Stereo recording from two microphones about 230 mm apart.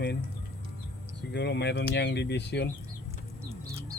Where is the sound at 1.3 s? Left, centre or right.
Left.